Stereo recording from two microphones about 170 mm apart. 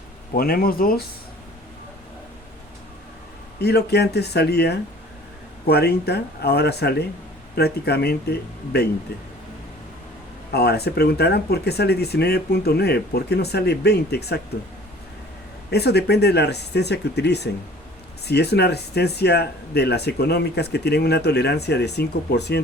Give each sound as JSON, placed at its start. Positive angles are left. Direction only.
{"t": 0.3, "sound": "speech", "side_deg": 60}
{"t": 3.6, "sound": "speech", "side_deg": 75}
{"t": 10.5, "sound": "speech", "side_deg": 70}
{"t": 15.7, "sound": "speech", "side_deg": 75}